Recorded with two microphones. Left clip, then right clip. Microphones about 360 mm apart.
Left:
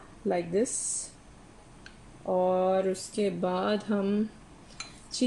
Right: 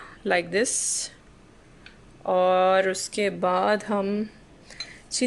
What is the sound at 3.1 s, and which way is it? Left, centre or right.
Speech, centre.